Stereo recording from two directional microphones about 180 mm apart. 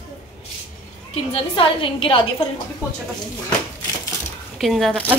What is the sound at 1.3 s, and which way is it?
A woman's voice, 30° left (ahead or behind).